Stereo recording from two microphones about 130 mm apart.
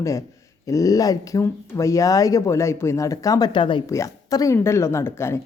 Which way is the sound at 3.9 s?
25° left (ahead or behind).